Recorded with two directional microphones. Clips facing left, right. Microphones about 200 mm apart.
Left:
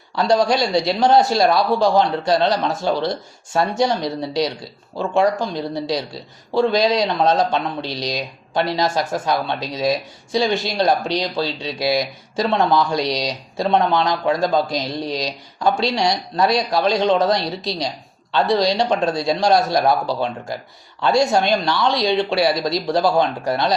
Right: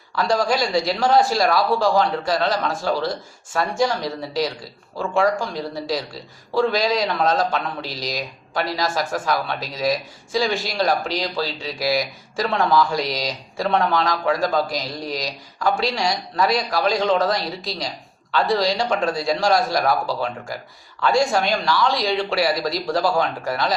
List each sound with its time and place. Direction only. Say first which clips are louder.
0.2 s speech: left 3 dB; 25° left (ahead or behind)